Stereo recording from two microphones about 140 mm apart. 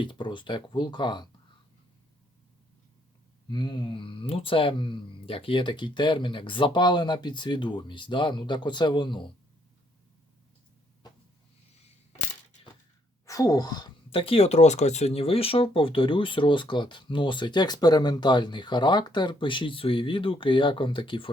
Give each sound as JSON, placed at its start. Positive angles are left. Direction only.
{"t": 0.0, "sound": "speech", "side_deg": 35}
{"t": 3.5, "sound": "speech", "side_deg": 30}
{"t": 13.2, "sound": "speech", "side_deg": 25}